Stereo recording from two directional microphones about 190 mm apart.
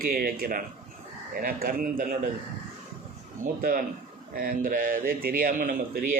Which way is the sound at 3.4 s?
50° right (ahead or behind).